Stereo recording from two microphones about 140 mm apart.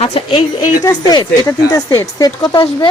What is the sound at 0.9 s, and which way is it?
Speech, 30° left (ahead or behind).